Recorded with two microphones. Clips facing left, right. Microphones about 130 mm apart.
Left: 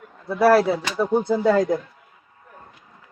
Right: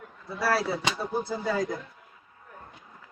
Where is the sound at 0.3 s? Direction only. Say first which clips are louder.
Left 11 dB; 65° left (ahead or behind).